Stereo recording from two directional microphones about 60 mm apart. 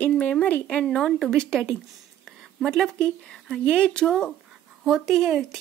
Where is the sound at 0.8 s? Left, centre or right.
Centre.